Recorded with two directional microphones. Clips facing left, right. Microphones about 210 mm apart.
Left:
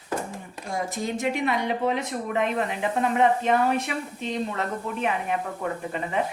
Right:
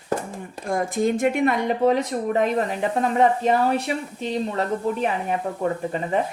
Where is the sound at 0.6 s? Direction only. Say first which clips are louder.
Right 7 dB; 50° right (ahead or behind); by 3.8 s 35° right (ahead or behind).